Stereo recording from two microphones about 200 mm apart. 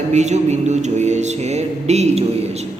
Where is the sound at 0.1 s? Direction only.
35° right (ahead or behind).